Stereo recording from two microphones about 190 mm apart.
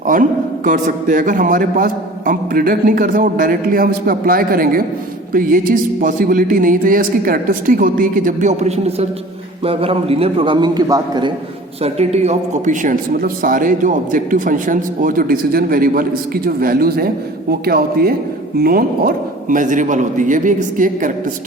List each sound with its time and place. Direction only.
0.1 s a man's voice: 45° right (ahead or behind); by 11.3 s 20° right (ahead or behind)
11.8 s a man's voice: 35° right (ahead or behind)